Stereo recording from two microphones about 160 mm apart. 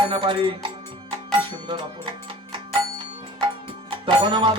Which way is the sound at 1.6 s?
30° right (ahead or behind).